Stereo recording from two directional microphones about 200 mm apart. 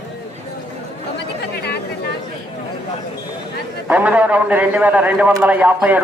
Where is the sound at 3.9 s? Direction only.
5° right (ahead or behind).